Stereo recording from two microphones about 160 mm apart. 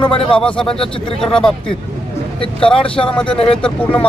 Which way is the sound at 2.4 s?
35° left (ahead or behind).